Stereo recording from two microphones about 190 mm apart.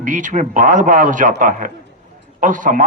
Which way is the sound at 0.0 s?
45° right (ahead or behind).